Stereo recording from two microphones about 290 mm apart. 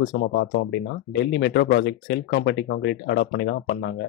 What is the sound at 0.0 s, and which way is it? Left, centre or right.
Speech, left.